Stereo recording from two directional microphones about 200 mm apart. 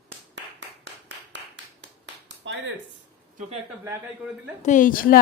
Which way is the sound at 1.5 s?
65° right (ahead or behind).